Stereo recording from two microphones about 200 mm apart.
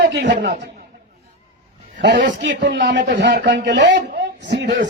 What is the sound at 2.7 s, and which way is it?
A man's voice, 60° right (ahead or behind).